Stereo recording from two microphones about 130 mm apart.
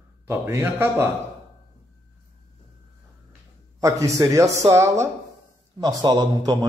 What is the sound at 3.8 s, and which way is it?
A man's voice, 25° right (ahead or behind).